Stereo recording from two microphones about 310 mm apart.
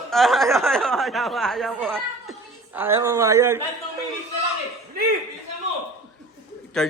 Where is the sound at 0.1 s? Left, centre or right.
Centre.